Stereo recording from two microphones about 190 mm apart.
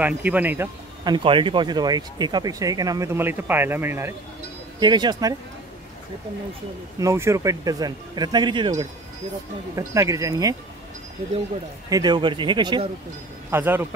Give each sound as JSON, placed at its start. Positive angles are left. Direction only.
{"t": 0.0, "sound": "speech", "side_deg": -10}
{"t": 1.0, "sound": "speech", "side_deg": -25}
{"t": 7.0, "sound": "speech", "side_deg": -15}
{"t": 11.9, "sound": "speech", "side_deg": -20}
{"t": 13.5, "sound": "speech", "side_deg": -10}